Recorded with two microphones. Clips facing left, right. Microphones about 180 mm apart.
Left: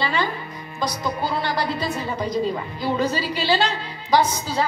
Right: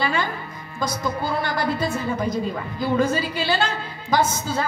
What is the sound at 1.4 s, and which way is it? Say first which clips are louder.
A woman's voice: right 1 dB; 50° right (ahead or behind).